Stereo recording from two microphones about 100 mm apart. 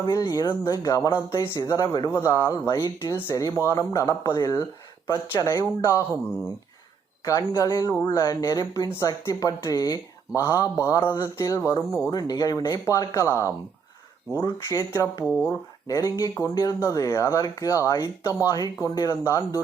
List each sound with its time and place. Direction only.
0.0 s speech: 35° left (ahead or behind)
2.4 s speech: 40° left (ahead or behind)
7.3 s speech: 35° left (ahead or behind)
12.0 s speech: 40° left (ahead or behind)
12.8 s speech: 30° left (ahead or behind)